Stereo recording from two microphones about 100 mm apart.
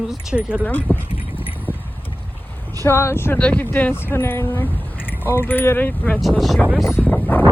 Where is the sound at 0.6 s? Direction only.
20° left (ahead or behind).